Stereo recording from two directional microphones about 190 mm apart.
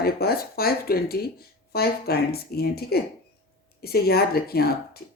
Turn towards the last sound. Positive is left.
turn(degrees=55)  # may be behind; listen again after turning